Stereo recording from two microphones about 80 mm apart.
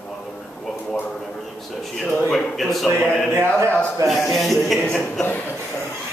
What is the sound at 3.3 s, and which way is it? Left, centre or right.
Speech, right.